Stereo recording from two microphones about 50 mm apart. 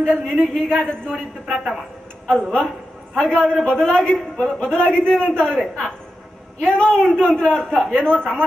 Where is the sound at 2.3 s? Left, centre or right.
Centre.